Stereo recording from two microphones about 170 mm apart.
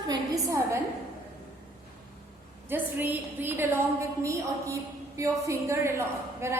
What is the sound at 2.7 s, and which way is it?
A woman's voice, 10° right (ahead or behind).